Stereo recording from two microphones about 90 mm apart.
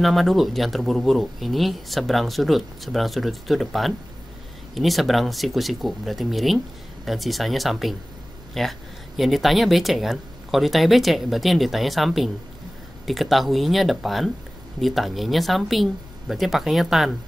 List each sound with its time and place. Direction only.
0.0 s speech: centre (ahead or behind)